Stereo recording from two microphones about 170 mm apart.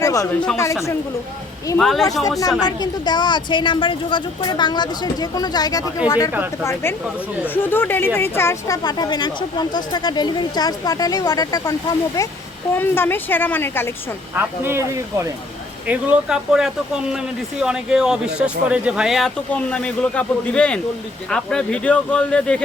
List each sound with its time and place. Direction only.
0.0 s a sound: 20° left (ahead or behind)
0.5 s speech: 15° left (ahead or behind)
1.8 s speech: centre (ahead or behind)
2.4 s speech: 20° left (ahead or behind)
12.7 s speech: 15° left (ahead or behind)
14.3 s speech: 15° right (ahead or behind); by 22.6 s 5° left (ahead or behind)